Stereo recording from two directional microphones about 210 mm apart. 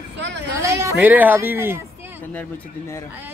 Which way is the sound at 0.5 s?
15° right (ahead or behind).